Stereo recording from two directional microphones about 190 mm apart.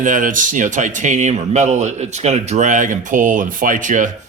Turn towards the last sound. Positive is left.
turn(degrees=-40)  # may be behind; listen again after turning